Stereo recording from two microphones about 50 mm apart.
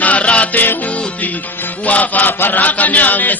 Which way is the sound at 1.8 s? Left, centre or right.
Left.